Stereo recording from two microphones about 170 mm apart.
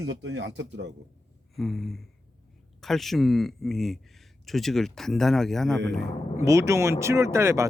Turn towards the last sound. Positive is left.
turn(degrees=-15)  # may be behind; listen again after turning